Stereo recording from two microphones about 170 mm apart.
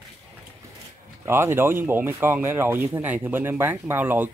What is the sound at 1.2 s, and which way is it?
Speech, 15° right (ahead or behind).